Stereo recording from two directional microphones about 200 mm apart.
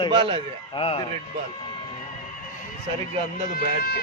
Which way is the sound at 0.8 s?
25° left (ahead or behind).